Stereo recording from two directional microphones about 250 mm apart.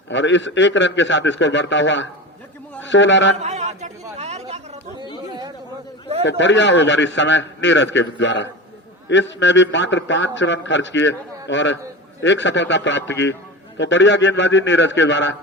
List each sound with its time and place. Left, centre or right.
0.1 s a man's voice: left
3.4 s chatter: right
6.2 s a man's voice: left